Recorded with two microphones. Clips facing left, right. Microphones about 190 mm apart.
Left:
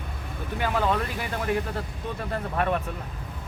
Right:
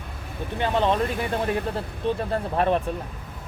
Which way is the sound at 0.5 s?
25° right (ahead or behind).